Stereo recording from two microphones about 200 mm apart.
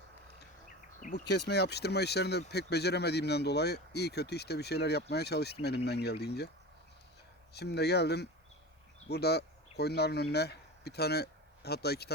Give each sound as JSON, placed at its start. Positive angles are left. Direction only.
{"t": 0.3, "sound": "a sound", "side_deg": 40}
{"t": 1.1, "sound": "speech", "side_deg": 55}
{"t": 7.5, "sound": "speech", "side_deg": 55}